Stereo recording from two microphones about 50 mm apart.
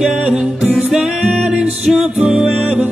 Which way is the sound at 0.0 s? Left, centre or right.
Centre.